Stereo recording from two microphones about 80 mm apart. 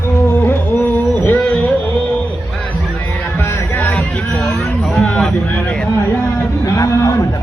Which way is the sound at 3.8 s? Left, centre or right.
Left.